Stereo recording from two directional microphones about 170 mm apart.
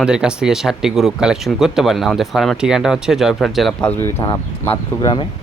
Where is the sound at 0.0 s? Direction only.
5° right (ahead or behind); by 4.2 s 15° left (ahead or behind).